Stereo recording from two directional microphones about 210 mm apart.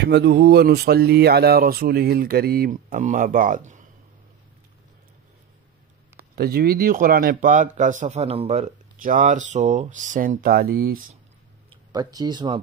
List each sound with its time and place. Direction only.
0.0 s speech: 55° right (ahead or behind); by 3.8 s 35° right (ahead or behind)
6.1 s speech: 45° right (ahead or behind)
11.9 s speech: 20° right (ahead or behind)